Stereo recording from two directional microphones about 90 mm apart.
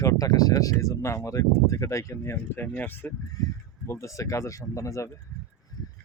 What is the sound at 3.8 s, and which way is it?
Speech, 35° left (ahead or behind).